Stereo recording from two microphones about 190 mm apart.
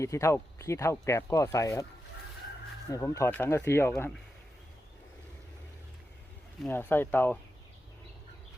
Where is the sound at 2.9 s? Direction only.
15° left (ahead or behind).